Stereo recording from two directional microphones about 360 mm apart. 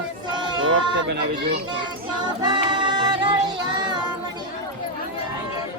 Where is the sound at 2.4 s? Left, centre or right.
Centre.